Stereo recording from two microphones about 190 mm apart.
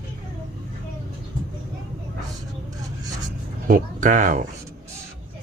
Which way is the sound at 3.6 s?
45° right (ahead or behind).